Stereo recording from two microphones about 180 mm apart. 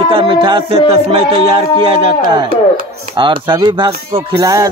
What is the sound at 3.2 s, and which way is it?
Speech, 25° right (ahead or behind).